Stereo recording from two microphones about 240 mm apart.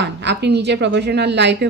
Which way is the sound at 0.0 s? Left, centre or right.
Right.